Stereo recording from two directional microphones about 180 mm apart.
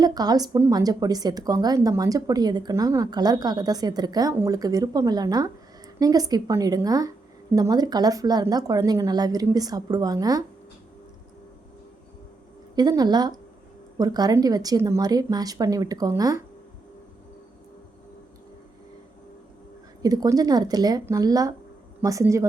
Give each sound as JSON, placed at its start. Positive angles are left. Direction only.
{"t": 0.0, "sound": "a woman's voice", "side_deg": -20}
{"t": 12.7, "sound": "a woman's voice", "side_deg": -20}
{"t": 20.0, "sound": "a woman's voice", "side_deg": -20}